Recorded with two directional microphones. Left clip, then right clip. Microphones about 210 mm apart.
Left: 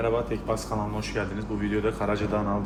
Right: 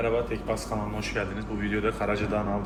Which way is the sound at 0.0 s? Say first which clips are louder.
Left 1 dB; 50° left (ahead or behind).